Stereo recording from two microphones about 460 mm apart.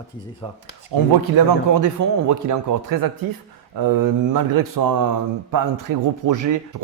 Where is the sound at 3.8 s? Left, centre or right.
Right.